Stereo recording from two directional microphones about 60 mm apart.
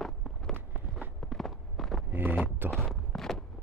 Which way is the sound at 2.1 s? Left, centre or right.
Right.